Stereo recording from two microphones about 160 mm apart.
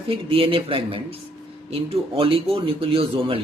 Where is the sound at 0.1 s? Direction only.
35° right (ahead or behind).